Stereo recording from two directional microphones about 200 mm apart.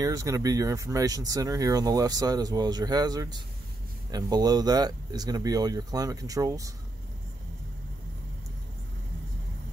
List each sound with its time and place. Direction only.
0.0 s speech: 15° right (ahead or behind)